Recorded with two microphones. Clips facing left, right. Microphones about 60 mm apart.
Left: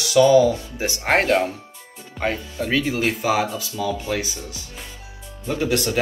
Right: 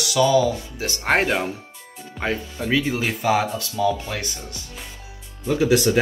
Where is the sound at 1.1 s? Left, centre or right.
Centre.